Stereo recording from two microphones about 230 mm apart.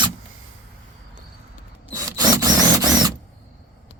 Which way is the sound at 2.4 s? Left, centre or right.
Centre.